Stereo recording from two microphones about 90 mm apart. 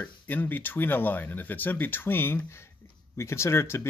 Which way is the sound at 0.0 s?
20° left (ahead or behind).